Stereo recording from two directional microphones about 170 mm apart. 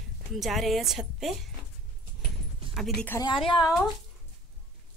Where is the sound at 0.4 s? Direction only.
Centre (ahead or behind).